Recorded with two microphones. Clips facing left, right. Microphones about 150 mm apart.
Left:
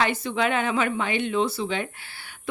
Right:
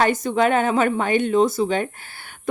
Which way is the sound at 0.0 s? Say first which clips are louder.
Right 6 dB; 45° right (ahead or behind).